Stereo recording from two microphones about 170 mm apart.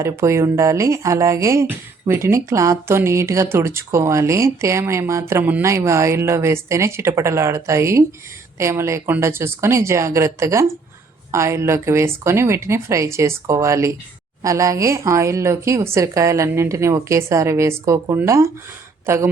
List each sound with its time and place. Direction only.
0.0 s speech: 15° right (ahead or behind)